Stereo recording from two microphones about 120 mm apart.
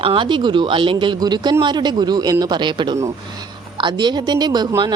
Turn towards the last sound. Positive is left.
turn(degrees=-35)  # may be behind; listen again after turning